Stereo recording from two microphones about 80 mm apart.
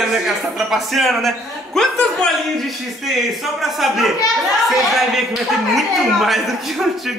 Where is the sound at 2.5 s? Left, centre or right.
Centre.